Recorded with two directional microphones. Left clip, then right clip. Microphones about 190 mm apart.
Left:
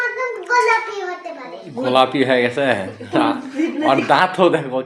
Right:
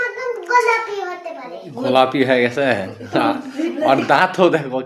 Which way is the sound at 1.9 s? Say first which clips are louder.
Even; 25° right (ahead or behind).